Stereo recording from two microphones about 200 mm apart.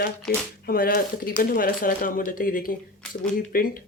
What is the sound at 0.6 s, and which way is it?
Speech, 50° left (ahead or behind).